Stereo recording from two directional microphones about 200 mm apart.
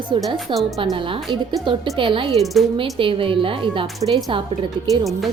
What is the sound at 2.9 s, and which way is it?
A woman's voice, 25° right (ahead or behind).